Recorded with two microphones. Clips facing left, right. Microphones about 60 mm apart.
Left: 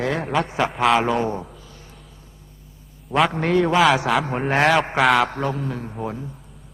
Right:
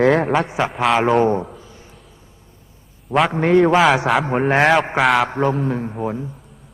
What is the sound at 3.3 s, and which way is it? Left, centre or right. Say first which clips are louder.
A man's voice: right 5 dB; centre.